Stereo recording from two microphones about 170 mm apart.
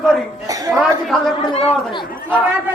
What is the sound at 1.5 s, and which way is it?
Speech, 30° left (ahead or behind).